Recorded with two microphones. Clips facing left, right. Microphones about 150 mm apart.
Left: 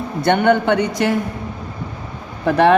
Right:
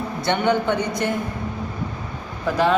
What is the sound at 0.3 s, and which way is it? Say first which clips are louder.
Speech: left 6 dB; 60° left (ahead or behind).